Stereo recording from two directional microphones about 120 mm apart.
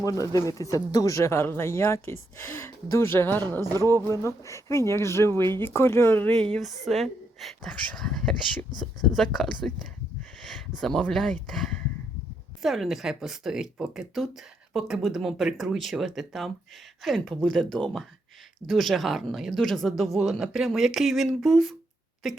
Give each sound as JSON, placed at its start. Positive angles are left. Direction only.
{"t": 0.0, "sound": "speech", "side_deg": 30}
{"t": 6.3, "sound": "speech", "side_deg": 5}